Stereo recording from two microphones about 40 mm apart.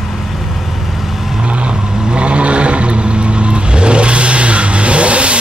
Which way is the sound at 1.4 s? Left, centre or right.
Right.